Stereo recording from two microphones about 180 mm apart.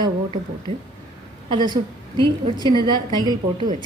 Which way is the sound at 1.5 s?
25° right (ahead or behind).